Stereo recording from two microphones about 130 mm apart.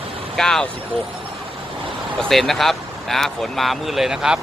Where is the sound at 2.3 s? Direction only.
Centre (ahead or behind).